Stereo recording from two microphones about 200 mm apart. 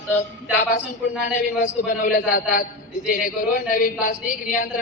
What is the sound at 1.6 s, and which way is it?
A woman's voice, 45° left (ahead or behind).